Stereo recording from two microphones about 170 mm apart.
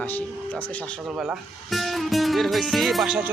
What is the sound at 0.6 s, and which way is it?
Speech, 10° left (ahead or behind).